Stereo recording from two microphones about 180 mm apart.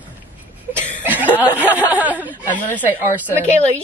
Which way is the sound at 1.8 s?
10° right (ahead or behind).